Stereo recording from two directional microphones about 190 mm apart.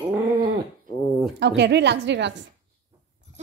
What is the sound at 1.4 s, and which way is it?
A woman's voice, 60° right (ahead or behind).